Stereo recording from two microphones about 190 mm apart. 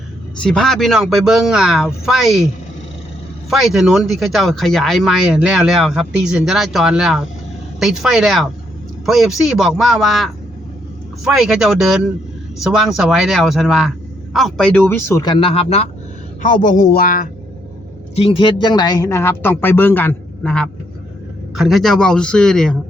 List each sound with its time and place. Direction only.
0.4 s speech: 5° left (ahead or behind)
3.5 s speech: centre (ahead or behind); by 15.9 s 30° left (ahead or behind)
16.4 s speech: 45° left (ahead or behind)
18.1 s speech: 30° left (ahead or behind); by 22.8 s 5° left (ahead or behind)